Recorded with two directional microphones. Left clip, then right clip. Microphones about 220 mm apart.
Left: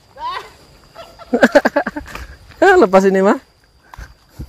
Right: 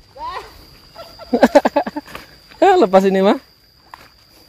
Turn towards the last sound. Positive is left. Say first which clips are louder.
# left 1 dB
turn(degrees=20)  # may be behind; listen again after turning